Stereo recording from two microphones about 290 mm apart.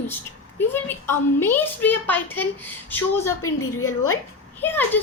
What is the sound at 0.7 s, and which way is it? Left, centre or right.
A woman's voice, centre.